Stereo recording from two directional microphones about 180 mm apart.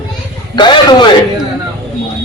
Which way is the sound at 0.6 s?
25° left (ahead or behind).